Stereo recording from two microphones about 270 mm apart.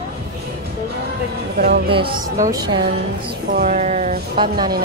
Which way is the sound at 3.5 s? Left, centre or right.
Right.